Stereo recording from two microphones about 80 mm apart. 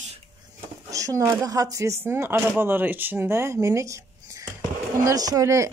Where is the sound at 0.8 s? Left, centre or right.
Right.